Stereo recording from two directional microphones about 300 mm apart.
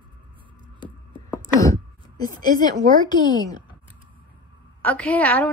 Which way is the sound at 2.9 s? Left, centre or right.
Centre.